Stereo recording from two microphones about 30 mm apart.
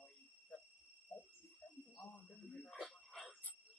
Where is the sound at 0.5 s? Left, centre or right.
Left.